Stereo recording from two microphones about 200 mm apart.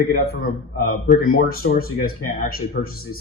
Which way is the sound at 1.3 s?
45° left (ahead or behind).